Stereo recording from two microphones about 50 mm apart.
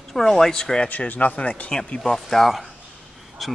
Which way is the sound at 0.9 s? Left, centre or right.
Left.